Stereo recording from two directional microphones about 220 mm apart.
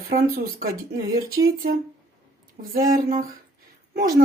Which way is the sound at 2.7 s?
40° right (ahead or behind).